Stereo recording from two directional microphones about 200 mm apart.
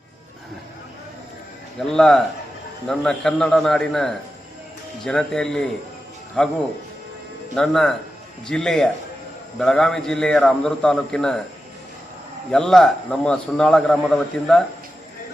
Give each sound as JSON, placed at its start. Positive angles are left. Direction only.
{"t": 1.9, "sound": "a man's voice", "side_deg": 0}
{"t": 7.5, "sound": "a man's voice", "side_deg": 0}
{"t": 12.5, "sound": "a man's voice", "side_deg": 0}